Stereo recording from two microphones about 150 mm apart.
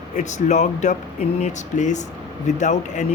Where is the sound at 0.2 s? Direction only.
55° left (ahead or behind).